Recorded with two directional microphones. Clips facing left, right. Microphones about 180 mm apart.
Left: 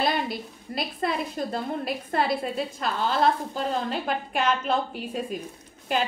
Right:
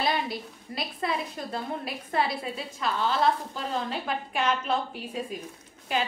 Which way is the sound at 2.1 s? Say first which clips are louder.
Left 3 dB; 45° left (ahead or behind).